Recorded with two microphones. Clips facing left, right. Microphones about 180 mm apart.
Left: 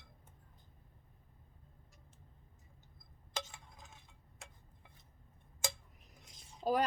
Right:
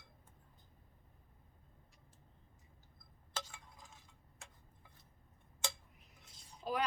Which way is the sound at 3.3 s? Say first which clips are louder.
Left 2 dB; 20° left (ahead or behind).